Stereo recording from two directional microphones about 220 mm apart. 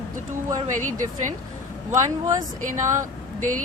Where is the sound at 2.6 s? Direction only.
35° right (ahead or behind).